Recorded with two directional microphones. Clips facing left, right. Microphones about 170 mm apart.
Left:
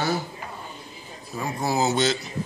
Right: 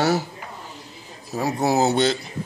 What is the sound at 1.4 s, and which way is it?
Speech, 65° right (ahead or behind).